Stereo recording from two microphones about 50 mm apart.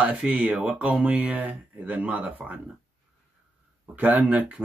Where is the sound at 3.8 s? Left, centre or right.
Right.